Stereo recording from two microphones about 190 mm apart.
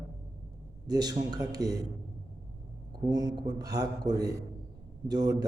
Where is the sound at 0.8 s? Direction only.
20° right (ahead or behind).